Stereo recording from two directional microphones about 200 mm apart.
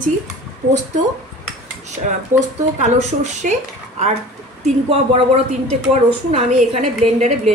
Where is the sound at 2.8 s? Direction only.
35° right (ahead or behind).